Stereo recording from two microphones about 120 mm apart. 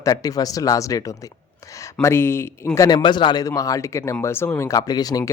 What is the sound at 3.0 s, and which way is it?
Speech, 40° left (ahead or behind).